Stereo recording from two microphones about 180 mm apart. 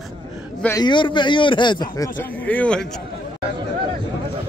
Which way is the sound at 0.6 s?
20° left (ahead or behind).